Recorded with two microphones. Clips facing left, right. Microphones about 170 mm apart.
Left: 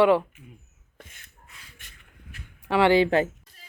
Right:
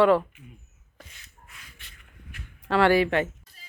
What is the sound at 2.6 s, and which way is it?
Speech, 15° left (ahead or behind).